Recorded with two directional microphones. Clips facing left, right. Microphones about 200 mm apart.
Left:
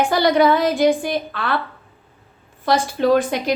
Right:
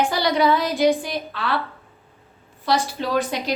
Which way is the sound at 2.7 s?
50° left (ahead or behind).